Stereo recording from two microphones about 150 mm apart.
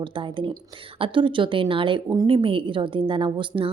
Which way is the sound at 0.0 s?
35° right (ahead or behind).